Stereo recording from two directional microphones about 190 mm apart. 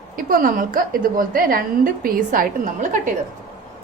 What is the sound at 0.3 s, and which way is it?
A woman's voice, 45° right (ahead or behind).